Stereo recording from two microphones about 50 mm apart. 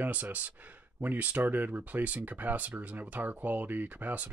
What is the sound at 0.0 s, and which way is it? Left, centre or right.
Speech, right.